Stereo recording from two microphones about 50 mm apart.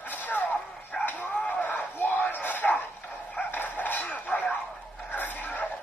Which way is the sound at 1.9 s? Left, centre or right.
Left.